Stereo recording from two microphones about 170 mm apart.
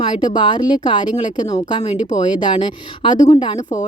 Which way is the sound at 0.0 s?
30° left (ahead or behind).